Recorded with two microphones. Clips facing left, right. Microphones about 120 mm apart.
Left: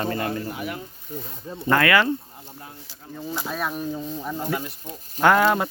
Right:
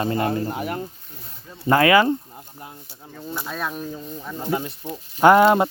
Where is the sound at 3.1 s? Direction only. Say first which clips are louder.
Left 1 dB; 5° left (ahead or behind).